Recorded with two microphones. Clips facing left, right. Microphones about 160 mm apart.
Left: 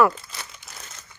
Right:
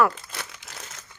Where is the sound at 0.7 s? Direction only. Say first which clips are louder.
Right 2 dB; 90° right.